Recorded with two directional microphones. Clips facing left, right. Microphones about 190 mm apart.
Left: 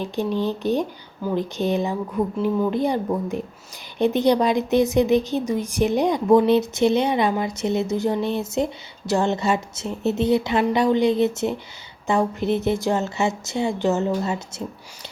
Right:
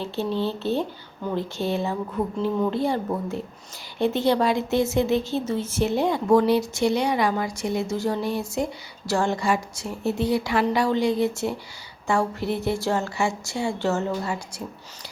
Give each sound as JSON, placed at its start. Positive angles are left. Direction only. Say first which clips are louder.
{"t": 0.0, "sound": "speech", "louder": "left 2 dB", "side_deg": 15}